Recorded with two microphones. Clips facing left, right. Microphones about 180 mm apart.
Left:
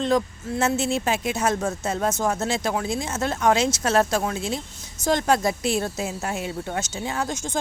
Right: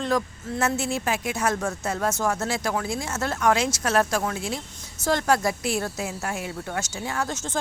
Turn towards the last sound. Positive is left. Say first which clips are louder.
# left 1 dB
turn(degrees=15)  # may be behind; listen again after turning